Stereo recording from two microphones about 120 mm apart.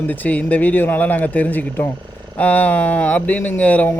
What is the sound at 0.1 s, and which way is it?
Speech, 15° left (ahead or behind).